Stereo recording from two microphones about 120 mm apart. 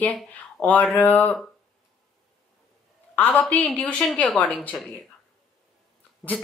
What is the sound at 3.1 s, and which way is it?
A woman's voice, 15° left (ahead or behind).